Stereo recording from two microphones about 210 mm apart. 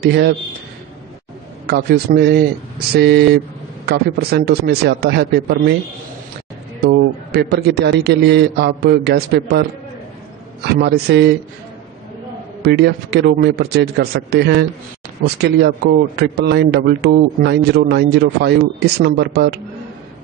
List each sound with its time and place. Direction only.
0.0 s a man's voice: 55° right (ahead or behind)
1.7 s a man's voice: 45° right (ahead or behind)
6.9 s a man's voice: 50° right (ahead or behind)
12.6 s a man's voice: 50° right (ahead or behind)